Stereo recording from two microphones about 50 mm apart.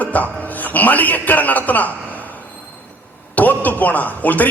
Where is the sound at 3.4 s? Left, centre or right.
Left.